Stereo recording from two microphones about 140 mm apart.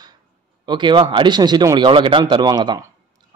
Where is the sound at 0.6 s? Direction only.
35° right (ahead or behind).